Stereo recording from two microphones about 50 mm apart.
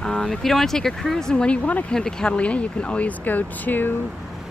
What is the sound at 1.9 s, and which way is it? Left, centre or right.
Speech, centre.